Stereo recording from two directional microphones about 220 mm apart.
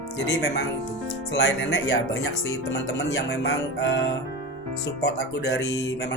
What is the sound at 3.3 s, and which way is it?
Speech, 50° left (ahead or behind).